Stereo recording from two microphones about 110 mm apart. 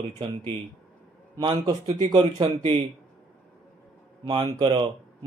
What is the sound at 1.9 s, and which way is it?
Speech, 50° right (ahead or behind).